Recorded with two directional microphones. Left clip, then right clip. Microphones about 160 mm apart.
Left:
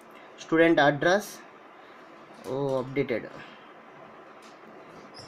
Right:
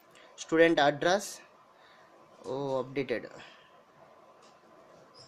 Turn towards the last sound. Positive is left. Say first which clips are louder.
# left 4 dB
turn(degrees=-20)  # may be behind; listen again after turning